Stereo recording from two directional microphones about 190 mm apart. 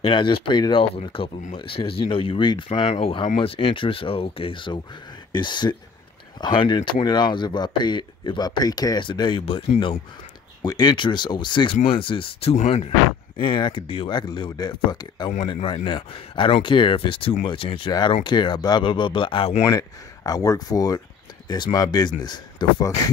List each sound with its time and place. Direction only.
0.0 s speech: 25° left (ahead or behind)
19.6 s speech: 15° left (ahead or behind)